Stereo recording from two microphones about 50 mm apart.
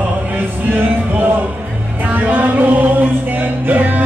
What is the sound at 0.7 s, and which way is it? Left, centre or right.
Music, right.